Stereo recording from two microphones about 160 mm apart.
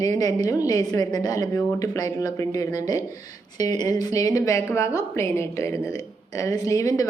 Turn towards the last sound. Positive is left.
turn(degrees=20)  # may be behind; listen again after turning